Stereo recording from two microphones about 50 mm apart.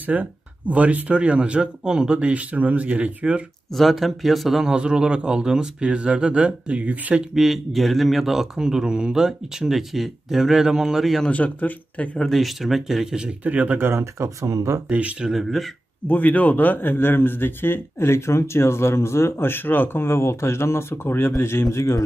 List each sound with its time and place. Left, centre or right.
0.0 s speech: right
3.7 s a man's voice: centre
4.6 s speech: centre
7.3 s a man's voice: centre
11.2 s speech: left
12.2 s a man's voice: centre
13.4 s speech: right
13.7 s speech: right
14.2 s speech: right
14.9 s speech: right
15.2 s a man's voice: centre
16.1 s a man's voice: left